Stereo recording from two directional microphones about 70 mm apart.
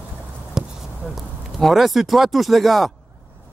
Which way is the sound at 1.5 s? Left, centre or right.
Centre.